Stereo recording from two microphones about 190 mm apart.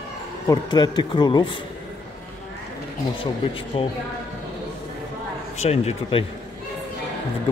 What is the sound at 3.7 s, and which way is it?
Speech, 30° left (ahead or behind).